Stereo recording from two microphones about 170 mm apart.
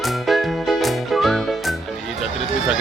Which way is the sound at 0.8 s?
Centre (ahead or behind).